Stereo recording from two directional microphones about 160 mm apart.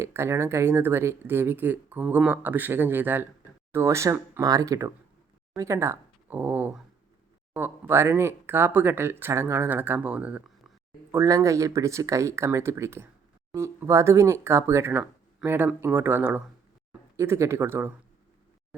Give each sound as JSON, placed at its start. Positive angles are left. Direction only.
{"t": 0.0, "sound": "speech", "side_deg": -15}
{"t": 11.1, "sound": "speech", "side_deg": -20}
{"t": 18.7, "sound": "a sound", "side_deg": -10}